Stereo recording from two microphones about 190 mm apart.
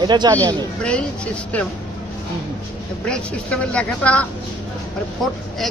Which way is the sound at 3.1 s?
5° left (ahead or behind).